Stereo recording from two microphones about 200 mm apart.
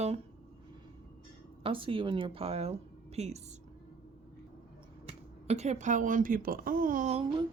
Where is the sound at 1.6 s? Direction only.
25° right (ahead or behind).